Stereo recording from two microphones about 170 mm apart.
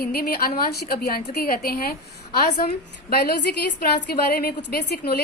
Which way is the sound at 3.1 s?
65° left (ahead or behind).